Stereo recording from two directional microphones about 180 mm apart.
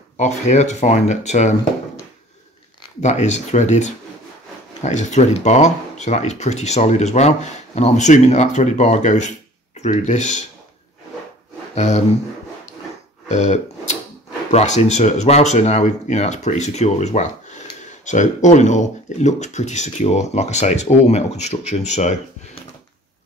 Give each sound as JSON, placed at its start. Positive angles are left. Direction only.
{"t": 0.2, "sound": "speech", "side_deg": 40}
{"t": 3.0, "sound": "speech", "side_deg": 40}
{"t": 11.7, "sound": "a sound", "side_deg": 40}
{"t": 13.3, "sound": "burping", "side_deg": 40}
{"t": 14.5, "sound": "speech", "side_deg": 35}